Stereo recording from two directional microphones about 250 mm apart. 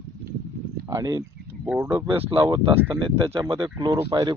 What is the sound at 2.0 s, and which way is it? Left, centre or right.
Speech, right.